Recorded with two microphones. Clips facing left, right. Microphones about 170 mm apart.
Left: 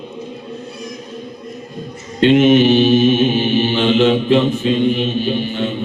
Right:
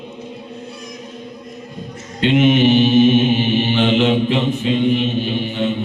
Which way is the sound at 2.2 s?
20° right (ahead or behind).